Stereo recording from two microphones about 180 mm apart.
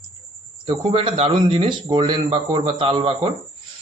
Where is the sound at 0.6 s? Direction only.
30° right (ahead or behind).